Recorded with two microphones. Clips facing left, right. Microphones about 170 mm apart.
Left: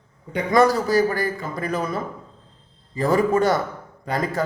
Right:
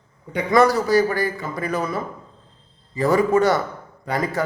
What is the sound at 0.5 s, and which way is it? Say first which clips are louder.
Speech: right 1 dB; 50° left (ahead or behind).